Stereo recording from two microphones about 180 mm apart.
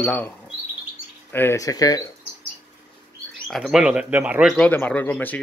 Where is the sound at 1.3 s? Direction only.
10° left (ahead or behind).